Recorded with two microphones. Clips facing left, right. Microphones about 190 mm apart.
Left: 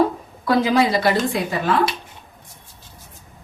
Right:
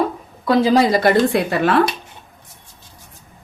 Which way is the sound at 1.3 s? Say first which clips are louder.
Right 4 dB; 70° right (ahead or behind).